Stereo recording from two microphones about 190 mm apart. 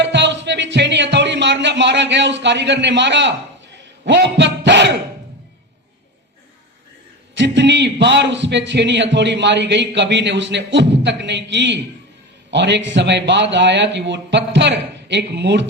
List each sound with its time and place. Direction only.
0.0 s music: 70° right (ahead or behind)
4.0 s a man's voice: 65° right (ahead or behind)
7.3 s a man's voice: 70° right (ahead or behind)